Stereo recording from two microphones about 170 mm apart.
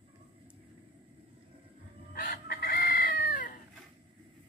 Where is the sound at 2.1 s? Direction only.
60° left (ahead or behind).